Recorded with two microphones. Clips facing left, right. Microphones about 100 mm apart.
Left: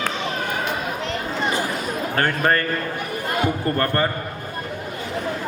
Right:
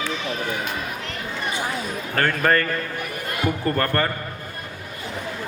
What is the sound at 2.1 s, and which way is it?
A man's voice, 25° left (ahead or behind).